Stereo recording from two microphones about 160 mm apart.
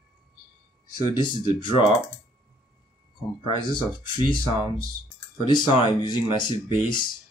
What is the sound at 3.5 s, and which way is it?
Speech, 30° left (ahead or behind).